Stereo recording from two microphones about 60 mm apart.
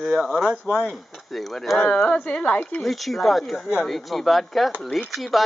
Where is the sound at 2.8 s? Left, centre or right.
Centre.